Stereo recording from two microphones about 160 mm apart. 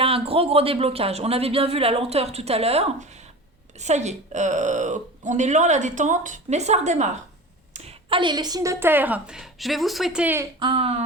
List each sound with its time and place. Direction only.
0.0 s a woman's voice: 35° right (ahead or behind); by 10.4 s 10° right (ahead or behind)
10.6 s speech: 35° right (ahead or behind)